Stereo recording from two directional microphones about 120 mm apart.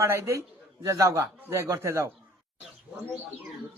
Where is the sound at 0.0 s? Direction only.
25° right (ahead or behind).